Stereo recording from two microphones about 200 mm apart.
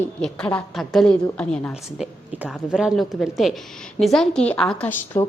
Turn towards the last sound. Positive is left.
turn(degrees=10)  # may be behind; listen again after turning